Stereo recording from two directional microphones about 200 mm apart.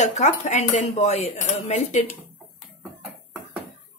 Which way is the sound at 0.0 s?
35° left (ahead or behind).